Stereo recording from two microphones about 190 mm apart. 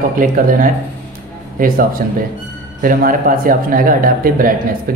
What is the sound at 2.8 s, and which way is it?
Speech, 45° right (ahead or behind).